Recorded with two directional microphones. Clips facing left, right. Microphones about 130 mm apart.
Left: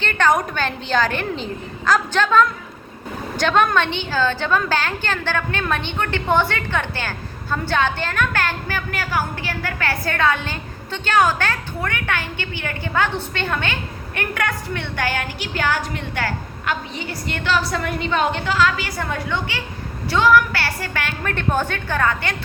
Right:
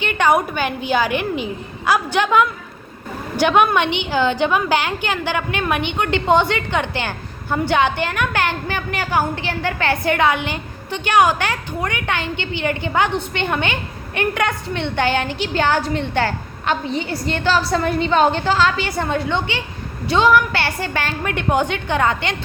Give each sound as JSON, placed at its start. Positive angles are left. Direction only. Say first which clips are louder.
{"t": 0.0, "sound": "a woman's voice", "louder": "right 2 dB", "side_deg": -15}